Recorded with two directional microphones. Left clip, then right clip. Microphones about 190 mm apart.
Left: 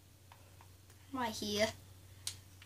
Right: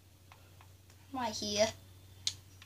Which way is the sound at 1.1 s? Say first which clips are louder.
Right 2 dB; 10° left (ahead or behind).